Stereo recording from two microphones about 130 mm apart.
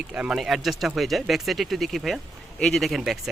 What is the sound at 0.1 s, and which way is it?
Speech, 10° right (ahead or behind).